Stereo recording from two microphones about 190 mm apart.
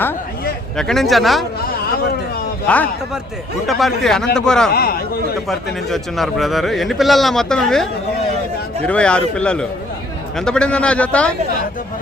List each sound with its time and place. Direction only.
0.8 s speech: centre (ahead or behind)
2.6 s a man's voice: 10° left (ahead or behind)
4.7 s a man's voice: 55° left (ahead or behind)
5.9 s speech: centre (ahead or behind)